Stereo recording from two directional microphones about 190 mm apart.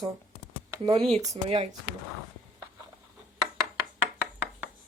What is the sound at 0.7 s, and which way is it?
Speech, 20° right (ahead or behind).